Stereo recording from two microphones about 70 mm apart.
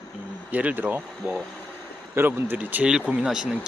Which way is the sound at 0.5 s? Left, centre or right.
Right.